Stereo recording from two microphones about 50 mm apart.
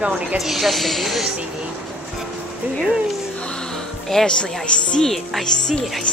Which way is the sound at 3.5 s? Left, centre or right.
Centre.